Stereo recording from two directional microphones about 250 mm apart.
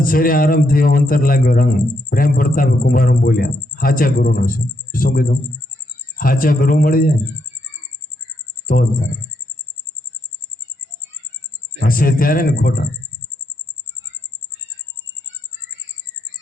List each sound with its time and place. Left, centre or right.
0.0 s a man's voice: left
8.6 s speech: left
11.8 s a man's voice: left